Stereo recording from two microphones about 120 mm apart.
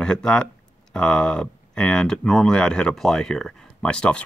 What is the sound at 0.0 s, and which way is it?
Speech, 5° left (ahead or behind).